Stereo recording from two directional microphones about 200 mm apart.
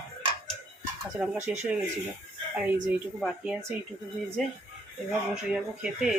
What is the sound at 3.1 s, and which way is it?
Speech, centre (ahead or behind).